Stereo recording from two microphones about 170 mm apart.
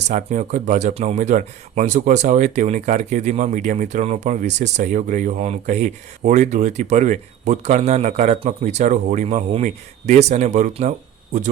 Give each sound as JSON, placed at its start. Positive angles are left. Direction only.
{"t": 0.0, "sound": "speech", "side_deg": -45}